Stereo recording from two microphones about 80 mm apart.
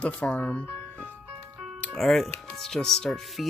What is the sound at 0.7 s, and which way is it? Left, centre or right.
Ice cream truck, left.